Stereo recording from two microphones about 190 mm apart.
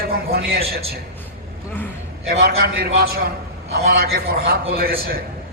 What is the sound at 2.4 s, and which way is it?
A man's voice, 55° right (ahead or behind).